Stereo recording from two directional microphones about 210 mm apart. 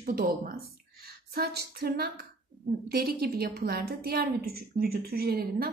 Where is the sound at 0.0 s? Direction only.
40° right (ahead or behind).